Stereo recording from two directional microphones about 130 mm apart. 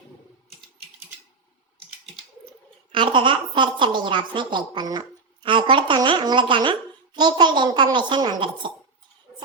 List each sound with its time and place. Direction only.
2.9 s a woman's voice: 40° right (ahead or behind)